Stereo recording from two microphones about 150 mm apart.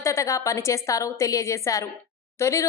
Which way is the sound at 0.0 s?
20° left (ahead or behind).